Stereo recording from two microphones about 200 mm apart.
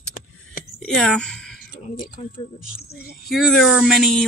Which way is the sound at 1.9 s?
40° left (ahead or behind).